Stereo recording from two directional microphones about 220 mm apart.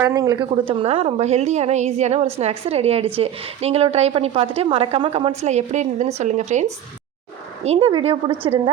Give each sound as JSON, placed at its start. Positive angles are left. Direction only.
{"t": 0.0, "sound": "a woman's voice", "side_deg": -15}